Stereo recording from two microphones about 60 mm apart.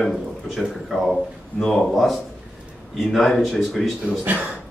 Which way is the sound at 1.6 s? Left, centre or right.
Centre.